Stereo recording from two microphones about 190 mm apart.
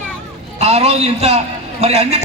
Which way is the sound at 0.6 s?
35° right (ahead or behind).